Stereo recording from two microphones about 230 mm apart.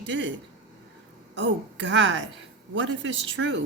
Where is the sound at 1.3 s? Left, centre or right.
Right.